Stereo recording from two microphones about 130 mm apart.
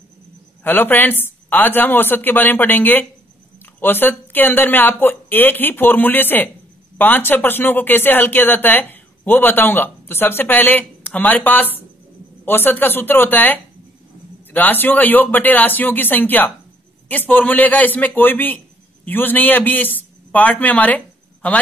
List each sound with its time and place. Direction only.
0.7 s a man's voice: 15° left (ahead or behind)